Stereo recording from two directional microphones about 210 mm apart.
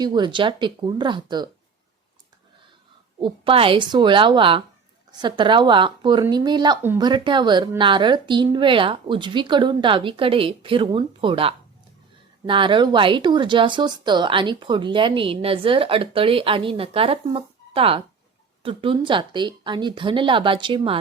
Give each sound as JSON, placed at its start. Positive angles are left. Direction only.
{"t": 0.0, "sound": "speech", "side_deg": -20}
{"t": 3.2, "sound": "speech", "side_deg": -25}
{"t": 7.1, "sound": "speech", "side_deg": -20}